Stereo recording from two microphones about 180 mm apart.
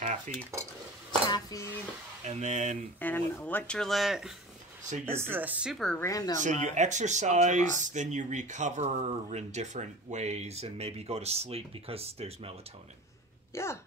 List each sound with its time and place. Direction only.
0.3 s cutlery: 45° right (ahead or behind)
1.3 s a sound: 20° left (ahead or behind)
2.2 s speech: 40° right (ahead or behind)
3.0 s speech: 10° left (ahead or behind)
5.0 s a woman's voice: 10° right (ahead or behind)
5.9 s speech: 15° left (ahead or behind)
6.4 s speech: 40° right (ahead or behind)
13.5 s speech: 15° left (ahead or behind)